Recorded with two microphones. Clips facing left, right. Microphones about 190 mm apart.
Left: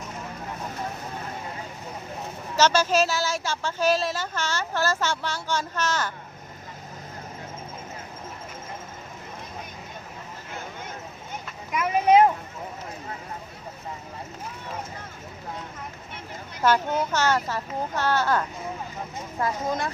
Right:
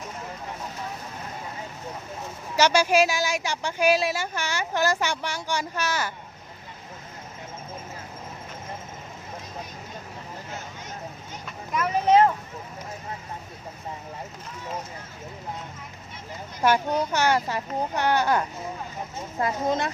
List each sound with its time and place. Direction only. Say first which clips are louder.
2.6 s a woman's voice: right 1 dB; 10° right (ahead or behind)
11.7 s vehicle: left 1 dB; 10° left (ahead or behind)
16.6 s a woman's voice: even; 15° right (ahead or behind)